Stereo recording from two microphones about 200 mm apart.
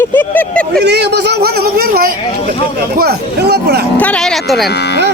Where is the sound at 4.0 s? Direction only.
5° left (ahead or behind).